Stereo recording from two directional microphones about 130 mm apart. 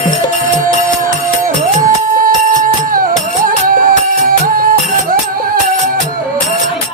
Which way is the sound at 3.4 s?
90° right.